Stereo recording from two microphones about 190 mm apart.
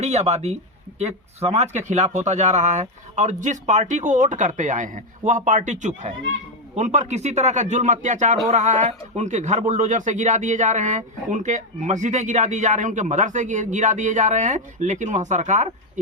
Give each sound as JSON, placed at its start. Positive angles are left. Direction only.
{"t": 0.0, "sound": "speech", "side_deg": -35}